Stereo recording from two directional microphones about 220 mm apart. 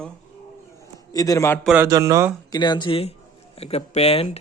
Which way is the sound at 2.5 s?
20° left (ahead or behind).